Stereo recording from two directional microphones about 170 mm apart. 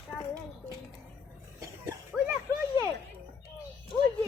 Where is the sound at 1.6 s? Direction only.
20° right (ahead or behind).